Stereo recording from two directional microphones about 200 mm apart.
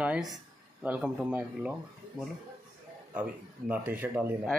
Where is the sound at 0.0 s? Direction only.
5° right (ahead or behind).